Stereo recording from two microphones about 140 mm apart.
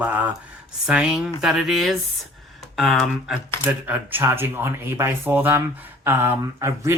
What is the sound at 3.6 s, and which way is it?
Speech, 10° right (ahead or behind).